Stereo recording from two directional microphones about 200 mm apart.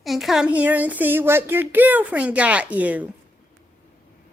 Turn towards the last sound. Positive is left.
turn(degrees=-10)  # may be behind; listen again after turning